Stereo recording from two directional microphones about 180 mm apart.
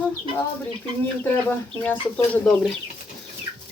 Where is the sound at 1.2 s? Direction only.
10° left (ahead or behind).